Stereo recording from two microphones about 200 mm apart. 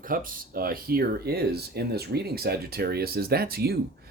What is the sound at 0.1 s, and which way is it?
Speech, 45° right (ahead or behind).